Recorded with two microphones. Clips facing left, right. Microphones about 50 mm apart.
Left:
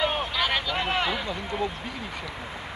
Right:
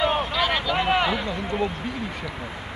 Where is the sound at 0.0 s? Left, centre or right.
Centre.